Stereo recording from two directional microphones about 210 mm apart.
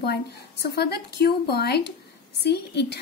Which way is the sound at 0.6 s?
50° left (ahead or behind).